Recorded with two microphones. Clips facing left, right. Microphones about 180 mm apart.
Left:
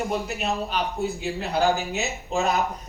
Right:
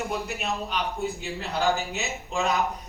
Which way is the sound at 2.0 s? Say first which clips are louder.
Left 3 dB; 40° left (ahead or behind).